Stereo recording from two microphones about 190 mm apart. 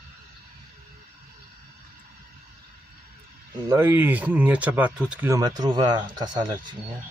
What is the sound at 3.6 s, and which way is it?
Speech, 10° right (ahead or behind).